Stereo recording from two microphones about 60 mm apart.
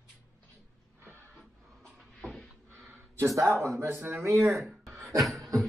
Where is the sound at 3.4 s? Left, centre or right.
Right.